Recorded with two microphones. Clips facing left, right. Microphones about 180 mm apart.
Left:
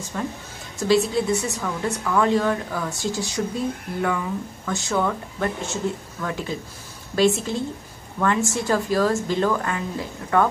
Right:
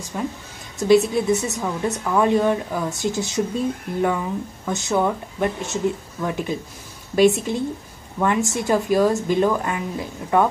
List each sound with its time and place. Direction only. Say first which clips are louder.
0.1 s a woman's voice: right 2 dB; 15° right (ahead or behind)